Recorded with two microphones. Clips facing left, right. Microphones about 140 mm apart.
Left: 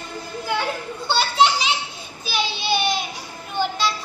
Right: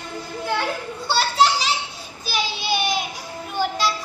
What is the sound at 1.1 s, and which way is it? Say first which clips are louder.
Children playing: even; 5° right (ahead or behind).